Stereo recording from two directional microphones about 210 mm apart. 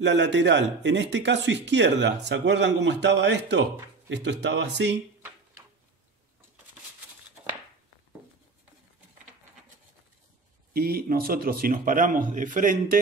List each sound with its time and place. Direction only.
0.0 s speech: 55° right (ahead or behind)
10.7 s speech: 45° right (ahead or behind)